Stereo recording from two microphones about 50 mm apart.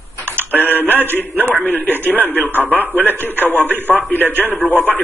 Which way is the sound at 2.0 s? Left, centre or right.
Left.